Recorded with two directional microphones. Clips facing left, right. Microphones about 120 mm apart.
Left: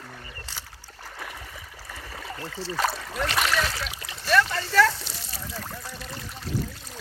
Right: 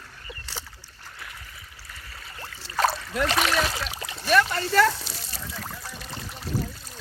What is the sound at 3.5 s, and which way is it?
Speech, 20° right (ahead or behind).